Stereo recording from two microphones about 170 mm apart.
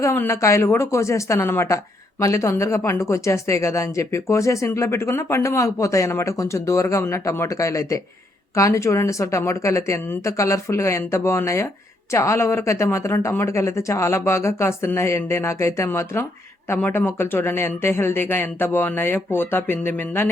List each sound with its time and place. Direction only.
0.0 s speech: 15° left (ahead or behind)